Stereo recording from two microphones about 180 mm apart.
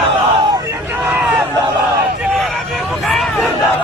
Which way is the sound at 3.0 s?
Centre (ahead or behind).